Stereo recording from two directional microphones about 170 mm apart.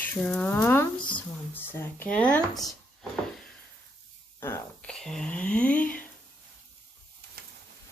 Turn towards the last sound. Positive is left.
turn(degrees=10)  # may be behind; listen again after turning